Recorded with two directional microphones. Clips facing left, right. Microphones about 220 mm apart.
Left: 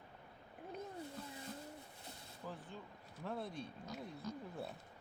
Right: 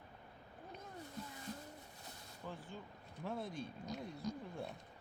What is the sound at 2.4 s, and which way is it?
Vehicle, centre (ahead or behind).